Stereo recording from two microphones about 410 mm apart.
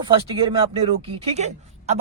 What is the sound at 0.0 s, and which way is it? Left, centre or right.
Speech, centre.